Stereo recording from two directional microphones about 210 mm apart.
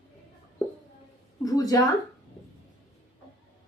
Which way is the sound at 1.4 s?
15° left (ahead or behind).